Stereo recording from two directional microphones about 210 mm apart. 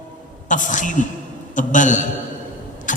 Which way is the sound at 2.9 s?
35° left (ahead or behind).